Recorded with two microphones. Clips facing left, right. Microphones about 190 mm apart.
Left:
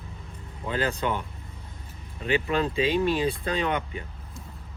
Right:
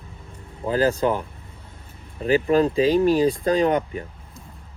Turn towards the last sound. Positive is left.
turn(degrees=-40)  # may be behind; listen again after turning